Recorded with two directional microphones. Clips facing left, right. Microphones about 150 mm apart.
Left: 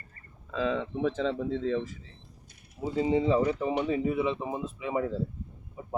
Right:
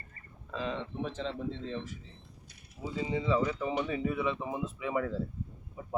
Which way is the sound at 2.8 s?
50° left (ahead or behind).